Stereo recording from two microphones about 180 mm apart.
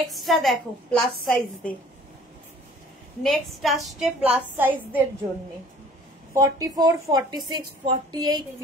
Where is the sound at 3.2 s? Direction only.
Centre (ahead or behind).